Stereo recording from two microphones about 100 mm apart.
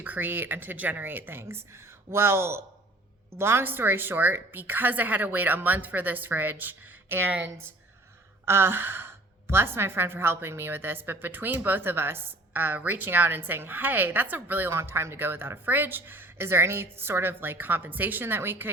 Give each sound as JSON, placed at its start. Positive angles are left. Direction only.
{"t": 0.0, "sound": "a woman's voice", "side_deg": -20}